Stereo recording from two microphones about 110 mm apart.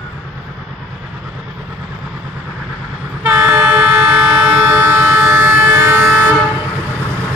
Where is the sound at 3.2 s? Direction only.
20° right (ahead or behind).